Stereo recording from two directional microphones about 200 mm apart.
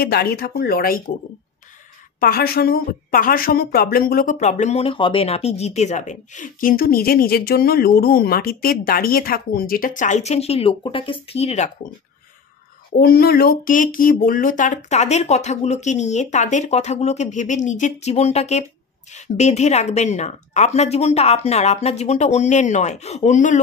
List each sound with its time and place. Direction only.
0.0 s a woman's voice: 50° left (ahead or behind)
2.1 s a woman's voice: 45° left (ahead or behind)
13.0 s speech: 50° left (ahead or behind)